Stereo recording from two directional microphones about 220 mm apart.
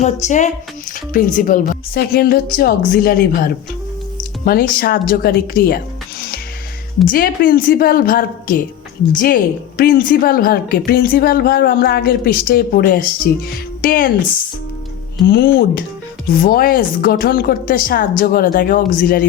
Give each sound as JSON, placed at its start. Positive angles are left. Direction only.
{"t": 0.0, "sound": "a woman's voice", "side_deg": 30}
{"t": 15.3, "sound": "a woman's voice", "side_deg": 40}